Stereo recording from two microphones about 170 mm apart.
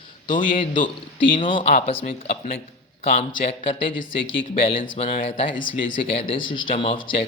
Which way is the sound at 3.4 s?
35° left (ahead or behind).